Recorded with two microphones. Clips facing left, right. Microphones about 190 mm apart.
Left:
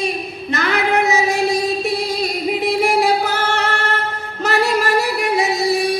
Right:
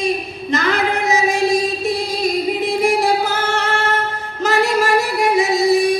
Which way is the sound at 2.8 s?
60° left (ahead or behind).